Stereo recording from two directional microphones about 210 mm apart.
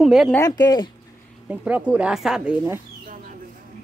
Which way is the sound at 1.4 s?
5° right (ahead or behind).